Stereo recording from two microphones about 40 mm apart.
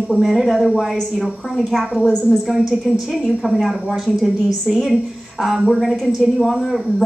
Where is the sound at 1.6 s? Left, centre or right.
Centre.